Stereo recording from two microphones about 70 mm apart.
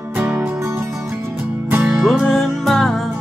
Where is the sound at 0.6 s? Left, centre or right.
Right.